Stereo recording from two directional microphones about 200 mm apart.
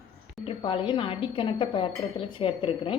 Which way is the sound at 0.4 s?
25° left (ahead or behind).